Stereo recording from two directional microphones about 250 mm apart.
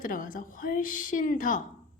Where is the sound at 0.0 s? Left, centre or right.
Left.